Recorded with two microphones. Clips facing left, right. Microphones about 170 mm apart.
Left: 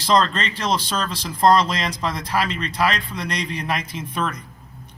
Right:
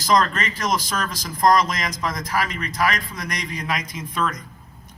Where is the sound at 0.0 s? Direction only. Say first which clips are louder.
Left 1 dB; 30° left (ahead or behind).